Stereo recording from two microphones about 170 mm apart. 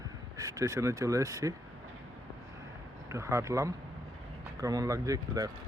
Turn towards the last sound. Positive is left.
turn(degrees=-20)  # may be behind; listen again after turning